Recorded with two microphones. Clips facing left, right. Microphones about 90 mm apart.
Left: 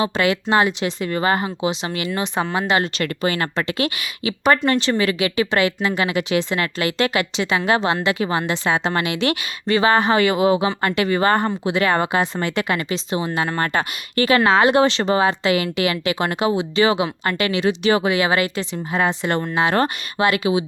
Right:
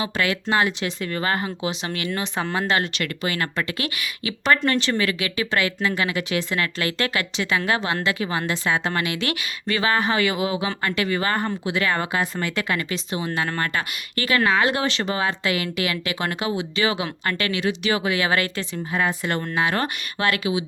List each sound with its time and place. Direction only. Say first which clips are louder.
0.0 s a woman's voice: left 5 dB; 20° left (ahead or behind)
3.0 s a woman's voice: left 4 dB; 30° left (ahead or behind)